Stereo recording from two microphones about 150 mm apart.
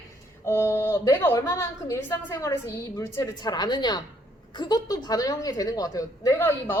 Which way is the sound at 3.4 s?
30° left (ahead or behind).